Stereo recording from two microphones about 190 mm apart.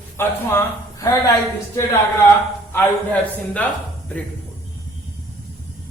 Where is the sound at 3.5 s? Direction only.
5° left (ahead or behind).